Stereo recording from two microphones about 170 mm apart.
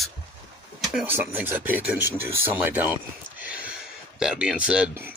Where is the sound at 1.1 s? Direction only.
10° right (ahead or behind).